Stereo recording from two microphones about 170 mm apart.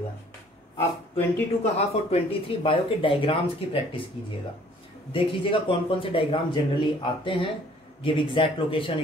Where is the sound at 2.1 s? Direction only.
35° left (ahead or behind).